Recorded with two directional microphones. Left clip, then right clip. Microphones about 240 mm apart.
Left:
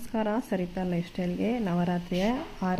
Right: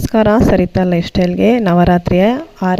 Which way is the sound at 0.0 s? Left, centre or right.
Right.